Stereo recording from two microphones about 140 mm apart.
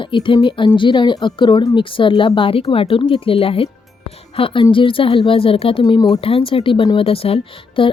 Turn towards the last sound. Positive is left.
turn(degrees=40)  # may be behind; listen again after turning